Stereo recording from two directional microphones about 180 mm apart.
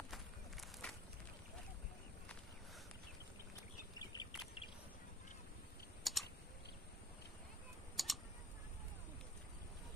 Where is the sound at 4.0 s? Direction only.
25° left (ahead or behind).